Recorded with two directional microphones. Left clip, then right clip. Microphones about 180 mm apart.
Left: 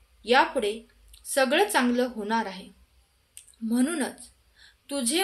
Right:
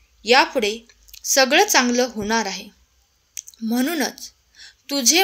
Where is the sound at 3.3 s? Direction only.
45° right (ahead or behind).